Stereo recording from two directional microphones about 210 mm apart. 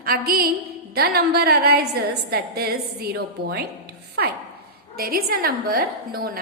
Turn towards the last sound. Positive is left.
turn(degrees=-45)  # may be behind; listen again after turning